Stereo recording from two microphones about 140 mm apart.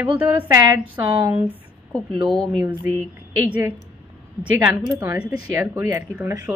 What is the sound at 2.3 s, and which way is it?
Speech, 5° left (ahead or behind).